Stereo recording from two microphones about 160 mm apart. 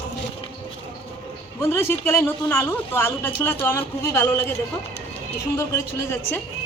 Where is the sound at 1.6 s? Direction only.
15° left (ahead or behind).